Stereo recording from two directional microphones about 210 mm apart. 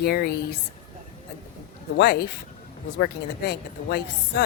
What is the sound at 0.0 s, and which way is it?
Speech, 50° left (ahead or behind).